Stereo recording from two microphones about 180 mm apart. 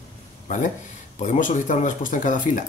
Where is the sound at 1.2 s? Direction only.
45° left (ahead or behind).